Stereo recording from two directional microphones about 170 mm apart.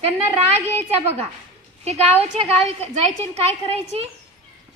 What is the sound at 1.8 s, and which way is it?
A woman's voice, 40° right (ahead or behind).